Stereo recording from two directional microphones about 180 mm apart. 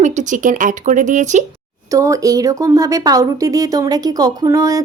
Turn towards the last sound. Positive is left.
turn(degrees=-20)  # may be behind; listen again after turning